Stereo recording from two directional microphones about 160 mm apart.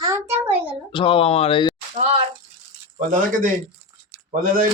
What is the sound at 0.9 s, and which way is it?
Speech, 35° left (ahead or behind).